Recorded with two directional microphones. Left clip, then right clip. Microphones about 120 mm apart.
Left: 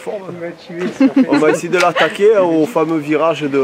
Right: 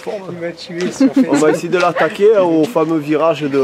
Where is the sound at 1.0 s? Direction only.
20° left (ahead or behind).